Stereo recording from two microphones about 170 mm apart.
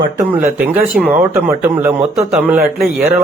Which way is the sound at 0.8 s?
60° right (ahead or behind).